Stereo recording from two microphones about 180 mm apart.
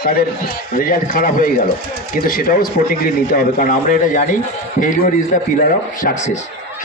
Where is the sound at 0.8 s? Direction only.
50° left (ahead or behind).